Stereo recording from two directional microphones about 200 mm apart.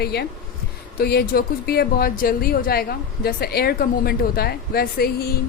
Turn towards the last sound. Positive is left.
turn(degrees=50)  # may be behind; listen again after turning